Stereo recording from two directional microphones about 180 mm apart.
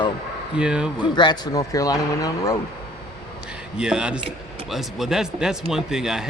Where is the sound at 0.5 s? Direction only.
5° right (ahead or behind).